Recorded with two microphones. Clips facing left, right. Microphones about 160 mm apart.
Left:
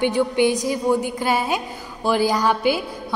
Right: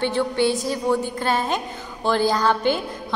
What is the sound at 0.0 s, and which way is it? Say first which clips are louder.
A woman's voice: left 2 dB; 15° left (ahead or behind).